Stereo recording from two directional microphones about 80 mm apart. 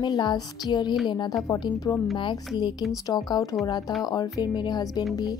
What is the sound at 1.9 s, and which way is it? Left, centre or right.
Speech, left.